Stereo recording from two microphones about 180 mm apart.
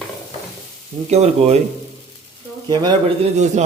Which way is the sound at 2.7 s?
25° right (ahead or behind).